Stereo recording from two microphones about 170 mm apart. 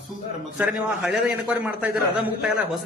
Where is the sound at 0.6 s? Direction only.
5° right (ahead or behind).